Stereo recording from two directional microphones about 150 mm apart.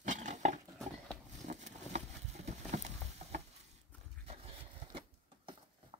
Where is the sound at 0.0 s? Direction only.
55° right (ahead or behind).